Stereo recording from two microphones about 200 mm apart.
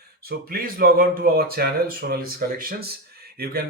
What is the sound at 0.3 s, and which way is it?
Speech, 50° right (ahead or behind).